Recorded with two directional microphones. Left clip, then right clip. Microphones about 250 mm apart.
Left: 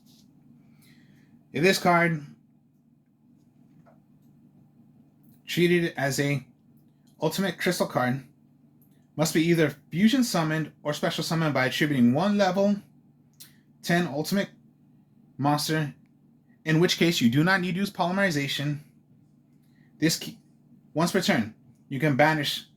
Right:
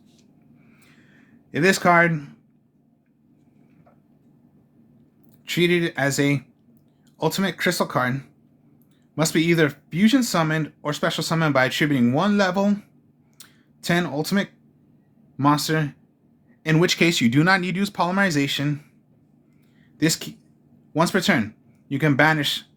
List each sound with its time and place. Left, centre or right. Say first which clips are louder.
1.5 s speech: right 4 dB; right
5.5 s speech: right 3 dB; right
13.4 s a sound: right 4 dB; right
15.4 s speech: right 5 dB; right
20.0 s speech: right 3 dB; right